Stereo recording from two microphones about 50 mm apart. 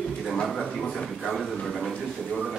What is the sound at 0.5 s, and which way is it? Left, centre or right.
A man's voice, centre.